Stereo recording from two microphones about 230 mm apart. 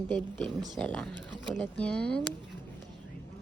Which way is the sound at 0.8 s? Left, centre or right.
Centre.